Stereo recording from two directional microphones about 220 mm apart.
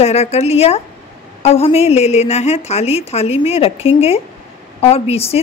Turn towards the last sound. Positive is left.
turn(degrees=25)  # may be behind; listen again after turning